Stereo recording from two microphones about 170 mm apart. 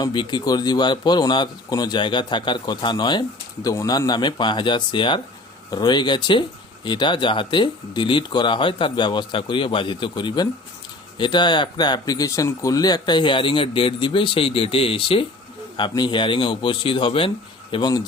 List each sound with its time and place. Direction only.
0.0 s speech: 25° left (ahead or behind)